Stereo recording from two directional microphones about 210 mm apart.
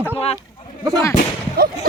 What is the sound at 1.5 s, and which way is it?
Speech, 45° right (ahead or behind).